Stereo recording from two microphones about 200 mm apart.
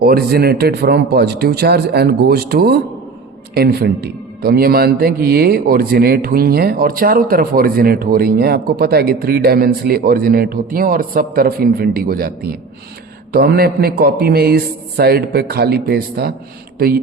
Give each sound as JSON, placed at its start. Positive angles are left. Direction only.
{"t": 0.0, "sound": "a man's voice", "side_deg": -50}